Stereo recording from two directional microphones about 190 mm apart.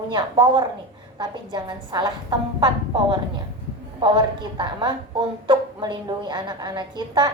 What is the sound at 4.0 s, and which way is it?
A woman's voice, 25° right (ahead or behind).